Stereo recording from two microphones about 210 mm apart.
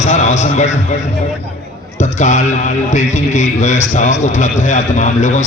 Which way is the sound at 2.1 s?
35° left (ahead or behind).